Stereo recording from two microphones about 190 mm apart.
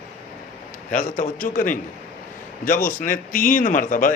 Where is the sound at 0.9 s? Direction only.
45° left (ahead or behind).